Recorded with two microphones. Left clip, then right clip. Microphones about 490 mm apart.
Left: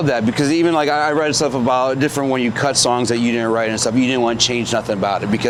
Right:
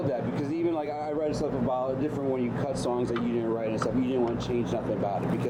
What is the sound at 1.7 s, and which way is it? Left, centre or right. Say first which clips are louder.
Speech: left 12 dB; left.